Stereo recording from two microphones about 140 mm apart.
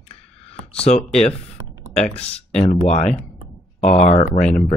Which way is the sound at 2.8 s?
55° left (ahead or behind).